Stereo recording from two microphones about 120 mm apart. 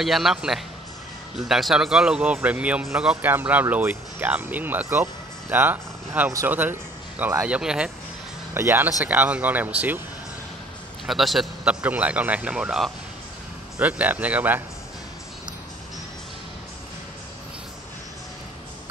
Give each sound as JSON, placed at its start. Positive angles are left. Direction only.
{"t": 0.0, "sound": "speech", "side_deg": 0}
{"t": 8.5, "sound": "speech", "side_deg": -20}
{"t": 11.1, "sound": "speech", "side_deg": 0}